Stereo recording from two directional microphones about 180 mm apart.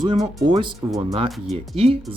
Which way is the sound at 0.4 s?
25° right (ahead or behind).